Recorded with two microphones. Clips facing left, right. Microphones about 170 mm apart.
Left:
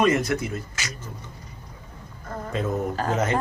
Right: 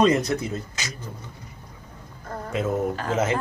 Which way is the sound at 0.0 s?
20° right (ahead or behind).